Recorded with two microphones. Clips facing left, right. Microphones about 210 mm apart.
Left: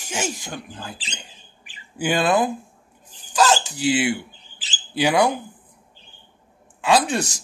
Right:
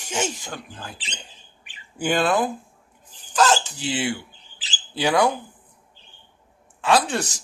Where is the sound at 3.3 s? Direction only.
10° left (ahead or behind).